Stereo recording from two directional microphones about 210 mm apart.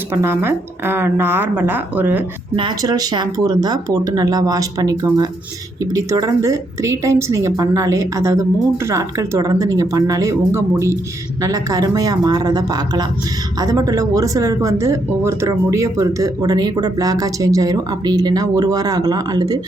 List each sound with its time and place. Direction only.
0.1 s speech: 10° right (ahead or behind)
2.6 s speech: 20° right (ahead or behind)